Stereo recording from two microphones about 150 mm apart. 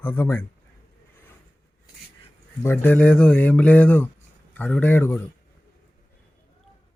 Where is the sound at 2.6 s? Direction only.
15° left (ahead or behind).